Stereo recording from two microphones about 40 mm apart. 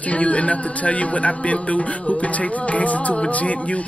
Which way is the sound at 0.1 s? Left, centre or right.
Left.